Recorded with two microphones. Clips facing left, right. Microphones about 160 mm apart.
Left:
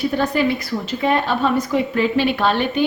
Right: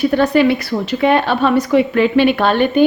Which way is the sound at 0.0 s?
70° right (ahead or behind).